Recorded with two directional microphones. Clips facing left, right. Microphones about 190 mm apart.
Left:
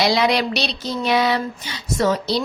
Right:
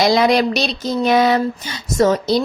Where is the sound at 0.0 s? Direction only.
45° right (ahead or behind).